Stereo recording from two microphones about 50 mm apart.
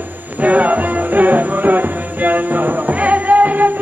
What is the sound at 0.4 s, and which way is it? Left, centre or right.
Music, right.